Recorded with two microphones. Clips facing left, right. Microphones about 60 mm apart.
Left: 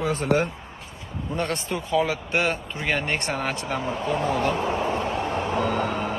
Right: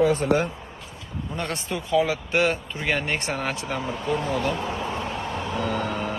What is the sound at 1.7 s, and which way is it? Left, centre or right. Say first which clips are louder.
Speech: right 2 dB; centre.